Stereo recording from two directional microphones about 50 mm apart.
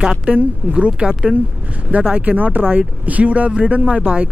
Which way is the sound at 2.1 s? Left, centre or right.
Right.